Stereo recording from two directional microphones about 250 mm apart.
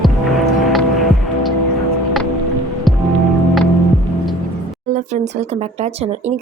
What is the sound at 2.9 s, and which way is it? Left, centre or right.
Music, centre.